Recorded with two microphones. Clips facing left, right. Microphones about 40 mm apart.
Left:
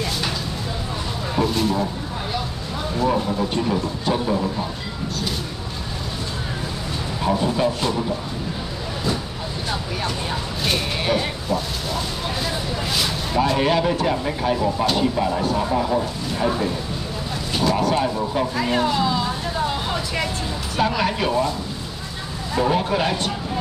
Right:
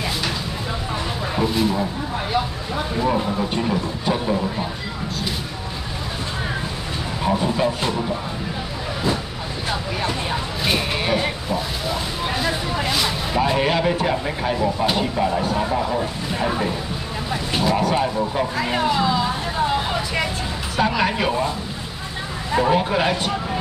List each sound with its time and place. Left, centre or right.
1.3 s speech: centre
3.0 s speech: centre
7.2 s speech: centre
9.7 s speech: centre
12.4 s vehicle: centre
13.9 s speech: centre
22.6 s speech: centre